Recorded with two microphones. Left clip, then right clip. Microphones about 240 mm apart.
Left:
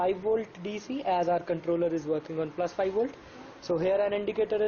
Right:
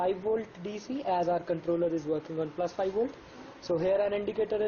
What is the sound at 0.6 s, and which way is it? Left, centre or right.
Speech, centre.